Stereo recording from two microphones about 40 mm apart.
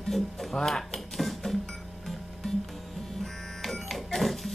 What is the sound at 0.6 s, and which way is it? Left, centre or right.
Speech, centre.